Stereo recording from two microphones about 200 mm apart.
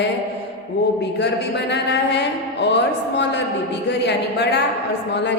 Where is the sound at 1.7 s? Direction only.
60° left (ahead or behind).